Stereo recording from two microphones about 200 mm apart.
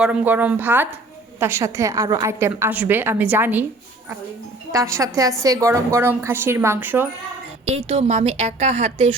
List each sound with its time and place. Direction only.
0.0 s a woman's voice: 5° right (ahead or behind)
4.7 s a woman's voice: 15° right (ahead or behind)
7.9 s speech: 30° right (ahead or behind)